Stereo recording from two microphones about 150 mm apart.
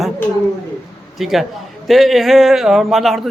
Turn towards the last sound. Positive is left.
turn(degrees=0)  # may be behind; listen again after turning